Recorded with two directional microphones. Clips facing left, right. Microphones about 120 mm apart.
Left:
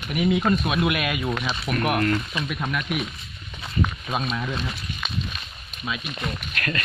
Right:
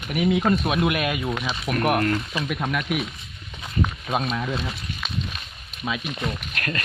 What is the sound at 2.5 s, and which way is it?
Speech, 60° right (ahead or behind).